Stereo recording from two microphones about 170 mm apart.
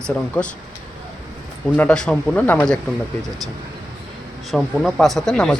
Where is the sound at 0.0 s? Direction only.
5° left (ahead or behind).